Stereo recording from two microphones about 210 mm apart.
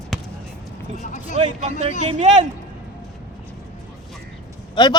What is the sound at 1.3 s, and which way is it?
Speech, 30° right (ahead or behind).